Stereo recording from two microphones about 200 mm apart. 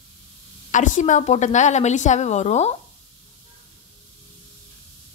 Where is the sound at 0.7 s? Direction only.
40° left (ahead or behind).